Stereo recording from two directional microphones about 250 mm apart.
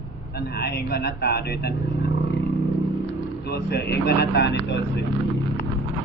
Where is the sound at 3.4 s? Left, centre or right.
Left.